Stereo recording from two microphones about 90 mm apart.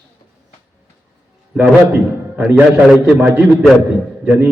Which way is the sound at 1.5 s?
15° right (ahead or behind).